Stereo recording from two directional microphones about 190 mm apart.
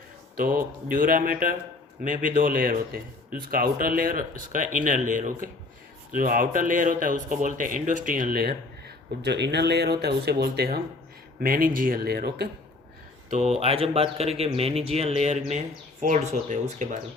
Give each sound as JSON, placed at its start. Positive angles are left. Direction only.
{"t": 0.3, "sound": "speech", "side_deg": -45}
{"t": 9.2, "sound": "speech", "side_deg": -65}
{"t": 13.3, "sound": "speech", "side_deg": -35}